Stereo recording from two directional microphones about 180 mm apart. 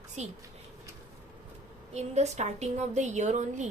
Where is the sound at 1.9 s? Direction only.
40° right (ahead or behind).